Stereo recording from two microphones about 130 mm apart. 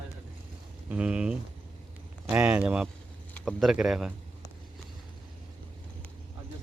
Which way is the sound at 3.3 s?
5° left (ahead or behind).